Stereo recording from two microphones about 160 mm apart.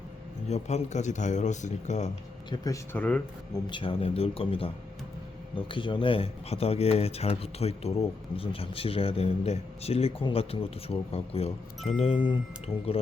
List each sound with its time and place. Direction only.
0.4 s speech: 45° left (ahead or behind)
2.9 s speech: 10° left (ahead or behind)
3.5 s speech: 30° left (ahead or behind)
5.7 s speech: 30° left (ahead or behind)